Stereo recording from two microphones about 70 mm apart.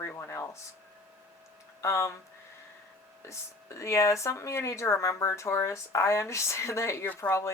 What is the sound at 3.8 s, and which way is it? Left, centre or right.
Speech, left.